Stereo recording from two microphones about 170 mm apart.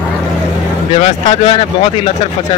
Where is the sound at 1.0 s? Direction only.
40° left (ahead or behind).